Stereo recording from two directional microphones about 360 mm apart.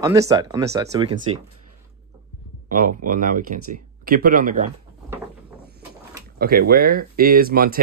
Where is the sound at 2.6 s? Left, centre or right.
Right.